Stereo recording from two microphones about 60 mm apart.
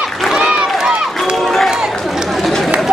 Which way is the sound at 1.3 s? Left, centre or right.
Centre.